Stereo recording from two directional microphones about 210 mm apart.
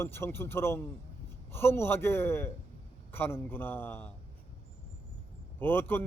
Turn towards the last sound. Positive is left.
turn(degrees=10)  # may be behind; listen again after turning